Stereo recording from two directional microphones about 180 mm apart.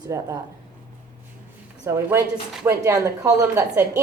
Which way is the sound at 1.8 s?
10° right (ahead or behind).